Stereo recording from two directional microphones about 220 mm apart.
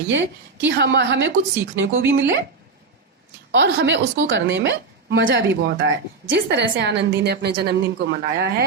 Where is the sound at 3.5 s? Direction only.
50° right (ahead or behind).